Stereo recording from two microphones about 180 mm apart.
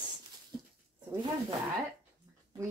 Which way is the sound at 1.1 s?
25° right (ahead or behind).